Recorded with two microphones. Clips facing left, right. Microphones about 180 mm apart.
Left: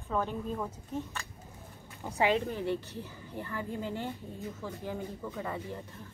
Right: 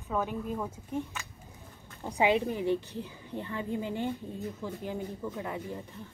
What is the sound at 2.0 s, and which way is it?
Speech, 15° right (ahead or behind).